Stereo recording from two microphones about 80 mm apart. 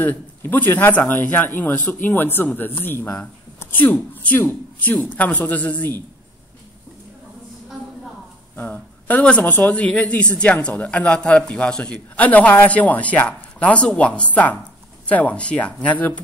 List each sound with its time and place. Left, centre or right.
0.0 s speech: left
8.5 s speech: left